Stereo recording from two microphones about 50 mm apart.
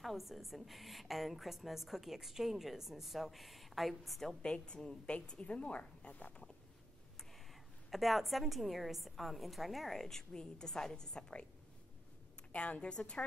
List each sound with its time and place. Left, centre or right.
0.0 s a woman's voice: centre
4.4 s a woman's voice: centre
7.9 s a woman's voice: centre
12.5 s a woman's voice: left